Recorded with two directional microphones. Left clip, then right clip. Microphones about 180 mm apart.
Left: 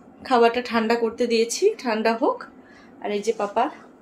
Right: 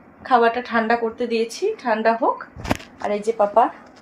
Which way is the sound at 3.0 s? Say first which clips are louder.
Right 4 dB; 35° right (ahead or behind).